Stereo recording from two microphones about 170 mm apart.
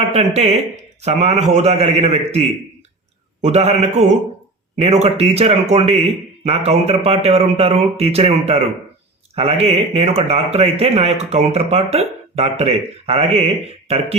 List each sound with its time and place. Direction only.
0.0 s speech: 40° right (ahead or behind)